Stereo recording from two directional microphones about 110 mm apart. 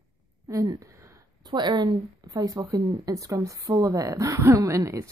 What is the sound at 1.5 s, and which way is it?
A woman's voice, 40° right (ahead or behind).